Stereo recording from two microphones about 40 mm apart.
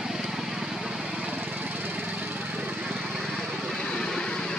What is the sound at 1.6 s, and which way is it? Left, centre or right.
Lawn mower, right.